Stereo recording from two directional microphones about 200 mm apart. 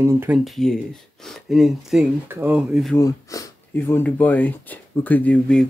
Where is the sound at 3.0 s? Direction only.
15° left (ahead or behind).